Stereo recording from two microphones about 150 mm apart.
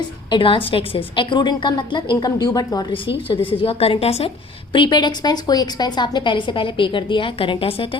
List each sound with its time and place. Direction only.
0.3 s a woman's voice: 35° left (ahead or behind)